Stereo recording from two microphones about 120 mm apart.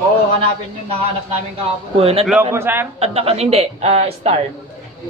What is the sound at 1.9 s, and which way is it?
Speech, 55° right (ahead or behind).